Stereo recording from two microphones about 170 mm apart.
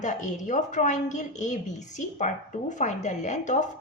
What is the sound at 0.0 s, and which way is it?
A woman's voice, 45° left (ahead or behind).